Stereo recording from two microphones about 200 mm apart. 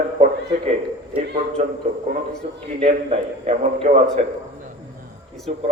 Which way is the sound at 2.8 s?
35° right (ahead or behind).